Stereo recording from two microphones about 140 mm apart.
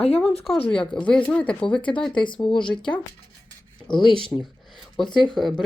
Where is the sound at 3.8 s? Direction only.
35° left (ahead or behind).